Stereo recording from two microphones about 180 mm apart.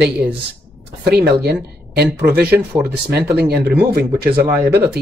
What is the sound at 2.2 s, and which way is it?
Speech, 10° right (ahead or behind).